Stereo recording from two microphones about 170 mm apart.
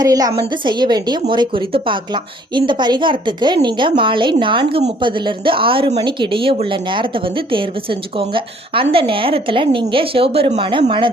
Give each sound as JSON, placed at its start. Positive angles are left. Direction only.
{"t": 0.0, "sound": "a woman's voice", "side_deg": -20}